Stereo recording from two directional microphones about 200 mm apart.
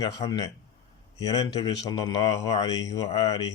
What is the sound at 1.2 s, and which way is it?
Speech, 20° left (ahead or behind).